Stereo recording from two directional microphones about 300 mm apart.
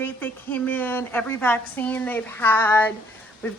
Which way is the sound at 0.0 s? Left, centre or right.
Centre.